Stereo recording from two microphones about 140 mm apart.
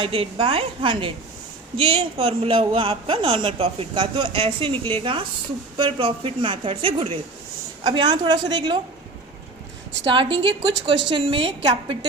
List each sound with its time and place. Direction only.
0.0 s a man's voice: 40° right (ahead or behind)
10.1 s a man's voice: 35° right (ahead or behind)